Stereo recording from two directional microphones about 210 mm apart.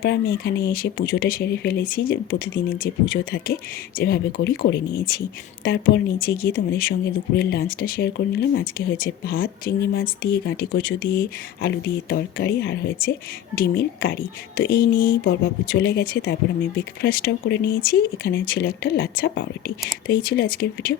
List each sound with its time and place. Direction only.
0.0 s speech: 45° left (ahead or behind)
15.2 s speech: 60° left (ahead or behind)